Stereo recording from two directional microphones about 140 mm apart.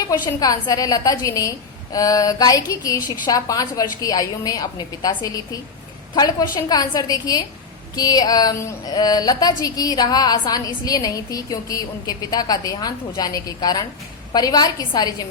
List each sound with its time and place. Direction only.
0.0 s speech: 25° left (ahead or behind)